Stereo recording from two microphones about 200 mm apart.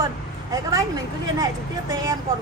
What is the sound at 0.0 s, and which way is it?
Speech, 15° right (ahead or behind).